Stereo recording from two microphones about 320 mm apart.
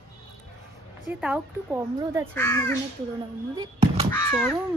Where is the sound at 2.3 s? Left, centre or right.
Centre.